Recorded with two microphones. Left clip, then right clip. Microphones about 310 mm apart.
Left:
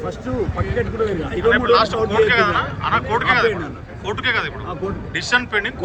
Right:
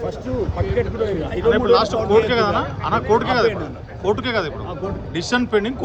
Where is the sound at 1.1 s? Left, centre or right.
Centre.